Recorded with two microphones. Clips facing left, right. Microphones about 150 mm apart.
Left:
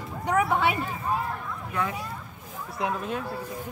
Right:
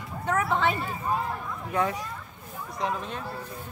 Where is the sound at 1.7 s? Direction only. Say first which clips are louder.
Right 3 dB; 30° right (ahead or behind).